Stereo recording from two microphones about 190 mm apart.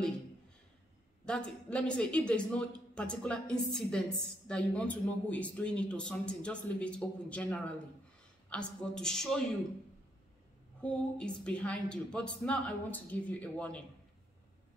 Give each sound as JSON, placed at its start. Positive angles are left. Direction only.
{"t": 1.2, "sound": "a man's voice", "side_deg": 5}
{"t": 10.8, "sound": "a man's voice", "side_deg": 5}